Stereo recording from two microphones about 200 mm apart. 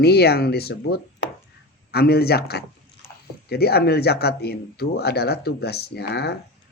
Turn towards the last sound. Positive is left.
turn(degrees=55)  # may be behind; listen again after turning